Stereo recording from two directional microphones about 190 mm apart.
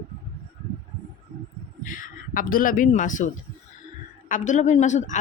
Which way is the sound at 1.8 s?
45° left (ahead or behind).